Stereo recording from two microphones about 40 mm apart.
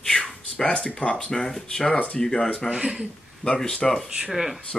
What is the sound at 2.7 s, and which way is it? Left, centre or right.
Speech, right.